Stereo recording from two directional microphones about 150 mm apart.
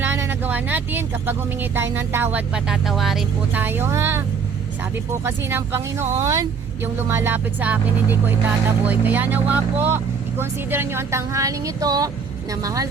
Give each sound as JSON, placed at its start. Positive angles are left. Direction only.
{"t": 0.0, "sound": "speech", "side_deg": -15}
{"t": 3.6, "sound": "speech", "side_deg": -15}
{"t": 5.2, "sound": "speech", "side_deg": -15}